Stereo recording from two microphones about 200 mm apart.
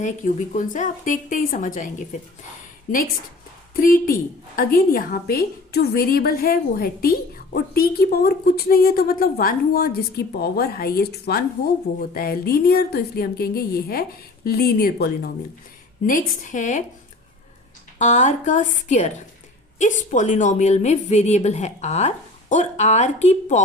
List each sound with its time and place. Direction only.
0.0 s a woman's voice: 40° left (ahead or behind)
3.8 s a woman's voice: 45° left (ahead or behind)
18.0 s a woman's voice: 35° left (ahead or behind)